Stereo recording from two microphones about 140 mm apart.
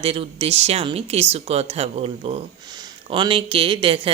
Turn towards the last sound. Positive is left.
turn(degrees=-40)  # may be behind; listen again after turning